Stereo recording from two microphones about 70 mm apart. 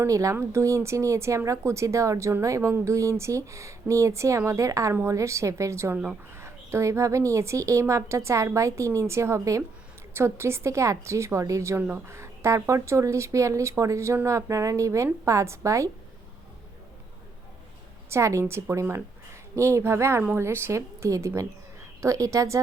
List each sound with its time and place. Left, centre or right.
0.1 s a woman's voice: right
5.9 s speech: centre
6.3 s a woman's voice: right
10.2 s a woman's voice: right
18.1 s a woman's voice: right